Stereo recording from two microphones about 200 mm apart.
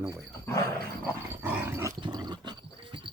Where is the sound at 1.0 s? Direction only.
10° right (ahead or behind).